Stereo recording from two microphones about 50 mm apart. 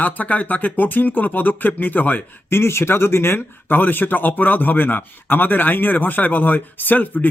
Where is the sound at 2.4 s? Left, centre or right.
Left.